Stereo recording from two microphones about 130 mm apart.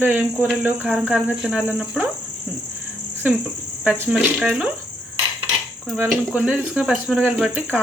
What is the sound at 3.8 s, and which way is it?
Speech, 10° right (ahead or behind).